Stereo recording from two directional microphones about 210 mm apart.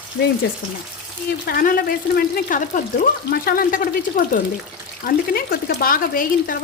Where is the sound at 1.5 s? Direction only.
45° left (ahead or behind).